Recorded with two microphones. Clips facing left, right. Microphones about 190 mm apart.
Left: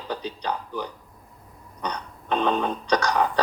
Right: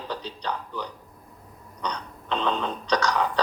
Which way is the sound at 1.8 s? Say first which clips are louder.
Left 1 dB; 55° left (ahead or behind).